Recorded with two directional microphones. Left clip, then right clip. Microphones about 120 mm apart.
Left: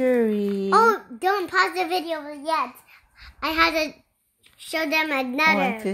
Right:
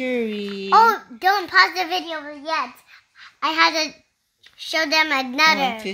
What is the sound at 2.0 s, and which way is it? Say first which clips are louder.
Speech: even; 5° right (ahead or behind).